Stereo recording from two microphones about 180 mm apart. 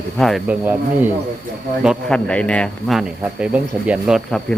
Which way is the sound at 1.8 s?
Centre (ahead or behind).